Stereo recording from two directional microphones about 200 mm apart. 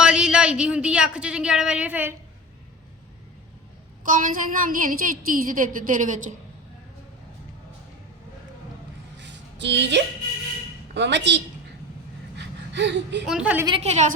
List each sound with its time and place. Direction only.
0.0 s speech: 5° right (ahead or behind)
4.0 s a woman's voice: 40° right (ahead or behind)
9.1 s a sound: 60° right (ahead or behind)
10.9 s a woman's voice: 60° right (ahead or behind)
12.4 s gasp: 60° right (ahead or behind)
13.2 s a woman's voice: 5° right (ahead or behind)
13.7 s a woman's voice: 30° right (ahead or behind)